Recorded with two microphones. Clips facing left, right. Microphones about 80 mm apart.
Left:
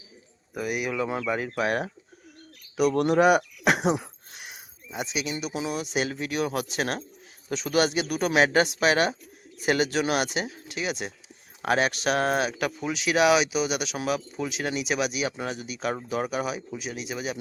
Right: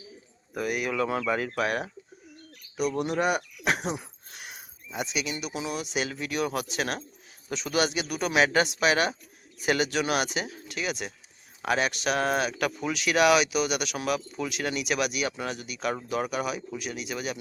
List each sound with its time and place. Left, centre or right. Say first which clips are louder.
0.5 s speech: even; centre
1.5 s speech: left 2 dB; left
2.7 s speech: left 6 dB; left
4.9 s speech: left 1 dB; left
11.6 s speech: left 2 dB; left